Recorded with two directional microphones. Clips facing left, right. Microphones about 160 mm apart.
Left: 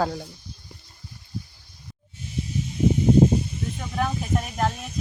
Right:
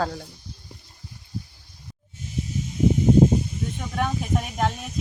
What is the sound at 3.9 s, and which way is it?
Speech, centre (ahead or behind).